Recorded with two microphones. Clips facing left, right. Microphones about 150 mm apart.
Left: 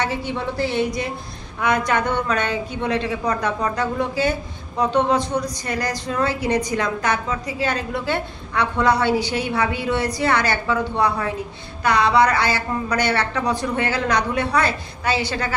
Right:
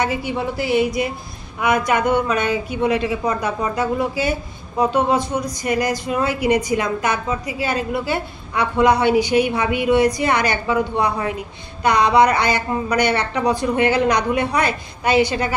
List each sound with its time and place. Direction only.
0.0 s a woman's voice: 10° right (ahead or behind)